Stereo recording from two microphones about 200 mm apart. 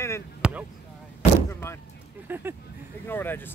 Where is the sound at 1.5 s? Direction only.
15° left (ahead or behind).